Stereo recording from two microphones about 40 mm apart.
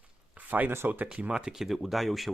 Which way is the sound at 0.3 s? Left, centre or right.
Right.